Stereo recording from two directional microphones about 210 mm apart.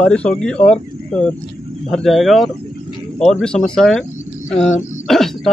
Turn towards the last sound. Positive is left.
turn(degrees=0)  # may be behind; listen again after turning